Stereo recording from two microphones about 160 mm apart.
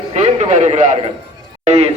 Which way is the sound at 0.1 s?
45° right (ahead or behind).